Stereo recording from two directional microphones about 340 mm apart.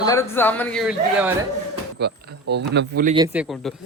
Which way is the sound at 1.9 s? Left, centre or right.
Right.